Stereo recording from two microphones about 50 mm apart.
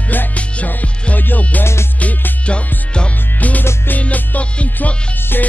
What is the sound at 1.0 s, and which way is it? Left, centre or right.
Music, left.